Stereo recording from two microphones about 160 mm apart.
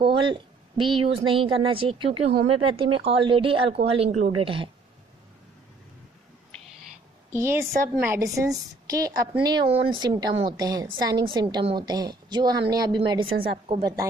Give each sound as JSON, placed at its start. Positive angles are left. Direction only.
{"t": 0.0, "sound": "speech", "side_deg": -30}
{"t": 7.8, "sound": "a woman's voice", "side_deg": -15}